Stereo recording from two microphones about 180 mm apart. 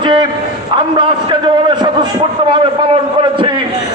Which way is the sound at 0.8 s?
25° right (ahead or behind).